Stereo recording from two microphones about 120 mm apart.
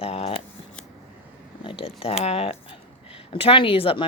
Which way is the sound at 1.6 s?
50° left (ahead or behind).